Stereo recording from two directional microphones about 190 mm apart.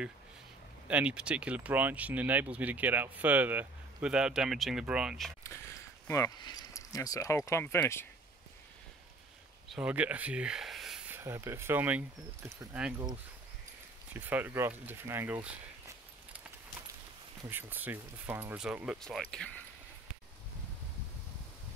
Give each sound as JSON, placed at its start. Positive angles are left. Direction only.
{"t": 0.8, "sound": "speech", "side_deg": -5}
{"t": 6.0, "sound": "speech", "side_deg": 15}
{"t": 9.7, "sound": "speech", "side_deg": -5}
{"t": 14.1, "sound": "speech", "side_deg": -10}
{"t": 17.5, "sound": "speech", "side_deg": -10}